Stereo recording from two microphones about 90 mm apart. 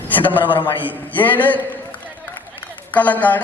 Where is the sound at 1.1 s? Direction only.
20° left (ahead or behind).